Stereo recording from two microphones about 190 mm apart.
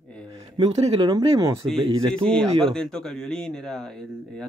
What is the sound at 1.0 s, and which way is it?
Speech, 20° right (ahead or behind).